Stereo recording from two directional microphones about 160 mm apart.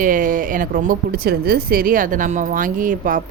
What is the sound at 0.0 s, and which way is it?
Speech, 55° right (ahead or behind).